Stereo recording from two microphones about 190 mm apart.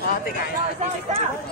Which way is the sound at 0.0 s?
50° left (ahead or behind).